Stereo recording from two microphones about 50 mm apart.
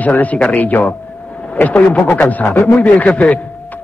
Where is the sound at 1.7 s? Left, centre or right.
Left.